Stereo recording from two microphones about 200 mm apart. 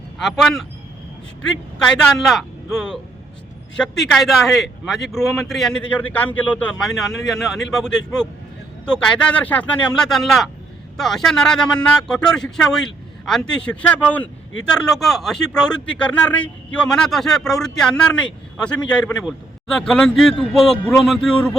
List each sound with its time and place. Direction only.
0.2 s a man's voice: centre (ahead or behind)
2.1 s a man's voice: centre (ahead or behind)